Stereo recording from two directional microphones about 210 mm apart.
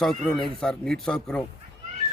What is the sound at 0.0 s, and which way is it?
Speech, centre (ahead or behind).